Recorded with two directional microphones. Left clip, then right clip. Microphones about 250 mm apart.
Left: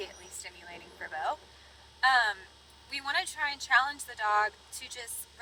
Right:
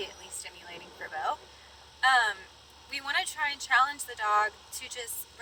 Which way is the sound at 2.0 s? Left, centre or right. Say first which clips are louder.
Right 1 dB; centre.